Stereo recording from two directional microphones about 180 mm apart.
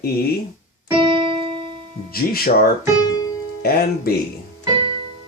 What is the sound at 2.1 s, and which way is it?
Speech, 55° left (ahead or behind).